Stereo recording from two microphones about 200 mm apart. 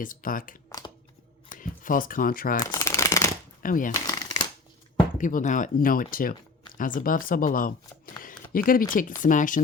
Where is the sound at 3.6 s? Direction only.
40° left (ahead or behind).